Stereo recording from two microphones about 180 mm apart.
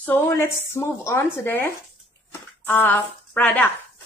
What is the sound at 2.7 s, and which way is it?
Speech, 10° left (ahead or behind).